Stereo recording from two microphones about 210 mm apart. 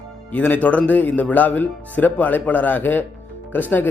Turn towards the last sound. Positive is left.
turn(degrees=10)  # may be behind; listen again after turning